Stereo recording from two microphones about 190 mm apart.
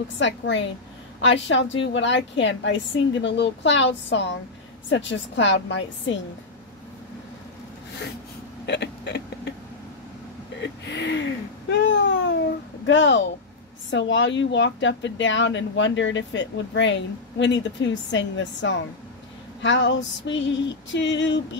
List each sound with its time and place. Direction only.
0.2 s speech: 70° left (ahead or behind)
8.6 s hiccup: 65° left (ahead or behind)
10.6 s a sound: 65° left (ahead or behind)
11.9 s babbling: 70° left (ahead or behind)
12.8 s speech: 75° left (ahead or behind)